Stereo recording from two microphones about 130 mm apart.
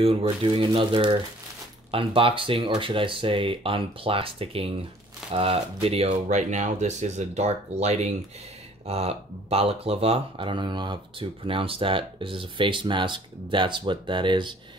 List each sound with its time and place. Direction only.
0.0 s speech: 45° right (ahead or behind)